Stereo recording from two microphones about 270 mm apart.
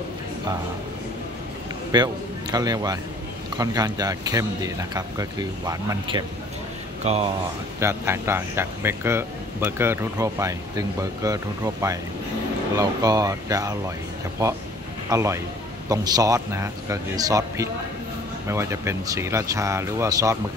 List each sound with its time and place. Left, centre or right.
1.9 s a man's voice: centre
7.8 s a man's voice: centre